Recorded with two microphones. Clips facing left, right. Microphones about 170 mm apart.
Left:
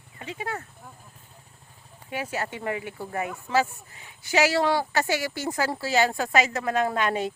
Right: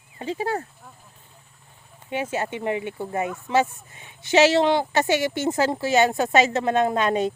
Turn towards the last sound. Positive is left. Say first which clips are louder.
# right 4 dB
turn(degrees=-20)  # may be behind; listen again after turning